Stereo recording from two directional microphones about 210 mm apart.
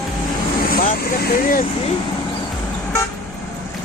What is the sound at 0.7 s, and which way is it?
Speech, 45° left (ahead or behind).